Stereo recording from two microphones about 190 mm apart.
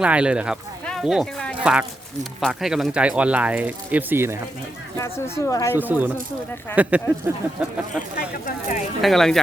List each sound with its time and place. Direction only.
0.0 s speech: 5° right (ahead or behind)
4.9 s speech: 15° left (ahead or behind)
5.7 s speech: 10° right (ahead or behind)
9.0 s speech: centre (ahead or behind)